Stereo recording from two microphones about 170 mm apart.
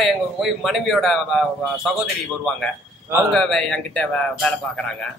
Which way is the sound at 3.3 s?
Centre (ahead or behind).